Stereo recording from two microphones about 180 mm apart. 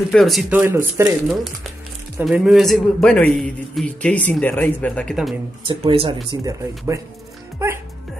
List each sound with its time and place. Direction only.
0.1 s speech: centre (ahead or behind)
2.2 s a man's voice: 5° right (ahead or behind)
5.7 s speech: 30° right (ahead or behind)
6.4 s speech: 15° right (ahead or behind)